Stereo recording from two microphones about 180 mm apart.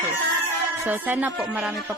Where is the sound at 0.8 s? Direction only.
10° right (ahead or behind).